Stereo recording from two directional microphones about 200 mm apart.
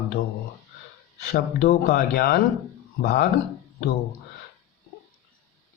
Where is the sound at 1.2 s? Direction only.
50° left (ahead or behind).